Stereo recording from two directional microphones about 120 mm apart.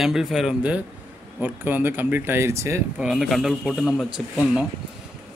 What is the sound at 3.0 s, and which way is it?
A man's voice, centre (ahead or behind).